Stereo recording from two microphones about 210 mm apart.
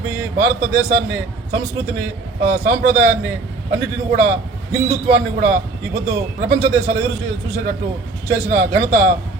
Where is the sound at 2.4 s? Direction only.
50° right (ahead or behind).